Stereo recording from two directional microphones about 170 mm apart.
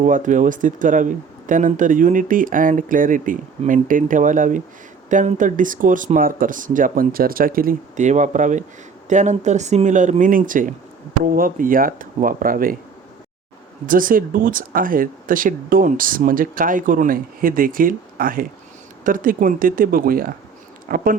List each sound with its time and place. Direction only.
0.0 s speech: 50° right (ahead or behind)
13.8 s speech: 55° right (ahead or behind)